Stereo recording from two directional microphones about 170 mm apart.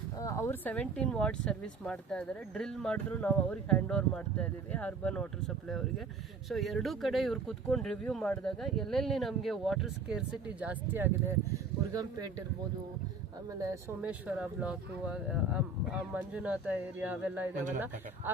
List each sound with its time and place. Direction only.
0.2 s speech: 15° left (ahead or behind); by 12.3 s 20° right (ahead or behind)
13.5 s speech: 20° right (ahead or behind)
14.0 s speech: 10° right (ahead or behind)